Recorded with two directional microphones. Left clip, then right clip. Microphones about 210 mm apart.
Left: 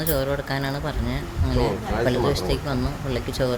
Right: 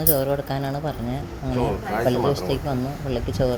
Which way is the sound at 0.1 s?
10° right (ahead or behind).